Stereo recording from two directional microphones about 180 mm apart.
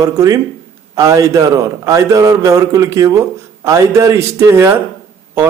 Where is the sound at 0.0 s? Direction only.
20° right (ahead or behind).